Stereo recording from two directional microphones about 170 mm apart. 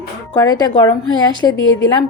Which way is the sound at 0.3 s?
20° left (ahead or behind).